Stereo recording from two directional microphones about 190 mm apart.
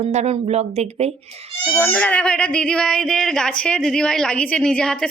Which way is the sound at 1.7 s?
10° left (ahead or behind).